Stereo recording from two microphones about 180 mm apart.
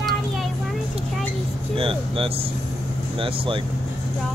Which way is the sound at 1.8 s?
30° right (ahead or behind).